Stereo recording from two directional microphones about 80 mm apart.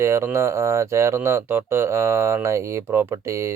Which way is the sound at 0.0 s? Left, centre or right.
Right.